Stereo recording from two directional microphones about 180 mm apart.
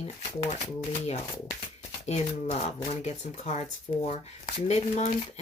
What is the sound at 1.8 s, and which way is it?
Speech, 35° left (ahead or behind).